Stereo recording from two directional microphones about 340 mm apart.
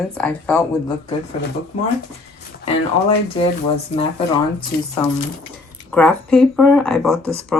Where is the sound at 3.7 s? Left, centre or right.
Centre.